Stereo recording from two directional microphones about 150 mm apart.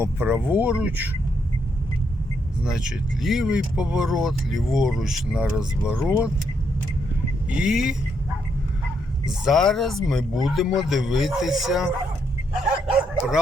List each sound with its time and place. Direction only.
0.0 s speech: 15° right (ahead or behind)
2.6 s speech: 5° right (ahead or behind)
7.5 s speech: 5° right (ahead or behind)
9.2 s speech: centre (ahead or behind)
12.9 s dog: 5° right (ahead or behind)